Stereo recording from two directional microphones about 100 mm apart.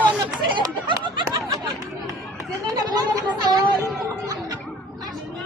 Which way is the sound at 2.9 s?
35° right (ahead or behind).